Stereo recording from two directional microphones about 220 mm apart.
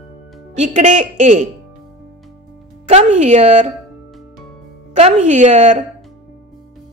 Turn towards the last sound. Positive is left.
turn(degrees=-35)  # may be behind; listen again after turning